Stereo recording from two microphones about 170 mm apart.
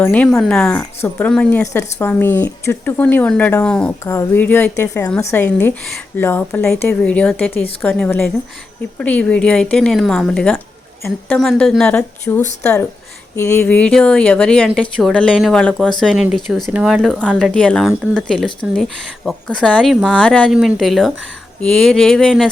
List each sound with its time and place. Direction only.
0.0 s speech: 10° left (ahead or behind)